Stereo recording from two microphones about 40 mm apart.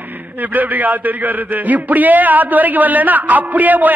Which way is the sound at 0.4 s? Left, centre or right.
Right.